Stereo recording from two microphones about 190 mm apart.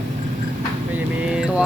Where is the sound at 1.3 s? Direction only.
5° right (ahead or behind).